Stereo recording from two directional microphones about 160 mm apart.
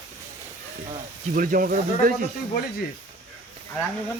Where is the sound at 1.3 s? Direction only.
60° right (ahead or behind).